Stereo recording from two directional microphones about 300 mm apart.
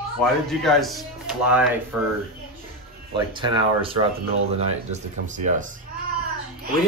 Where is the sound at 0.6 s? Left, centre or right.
Centre.